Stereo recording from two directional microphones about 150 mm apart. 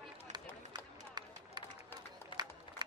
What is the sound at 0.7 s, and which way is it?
Run, 30° right (ahead or behind).